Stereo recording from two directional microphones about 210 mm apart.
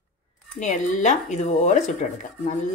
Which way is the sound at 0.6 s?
35° left (ahead or behind).